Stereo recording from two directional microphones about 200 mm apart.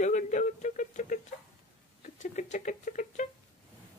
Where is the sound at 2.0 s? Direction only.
40° left (ahead or behind).